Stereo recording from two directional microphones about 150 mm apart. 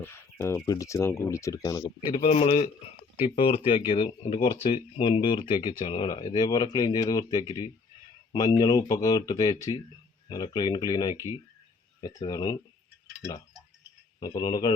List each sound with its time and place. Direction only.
0.0 s speech: 15° left (ahead or behind)
14.2 s speech: 25° left (ahead or behind)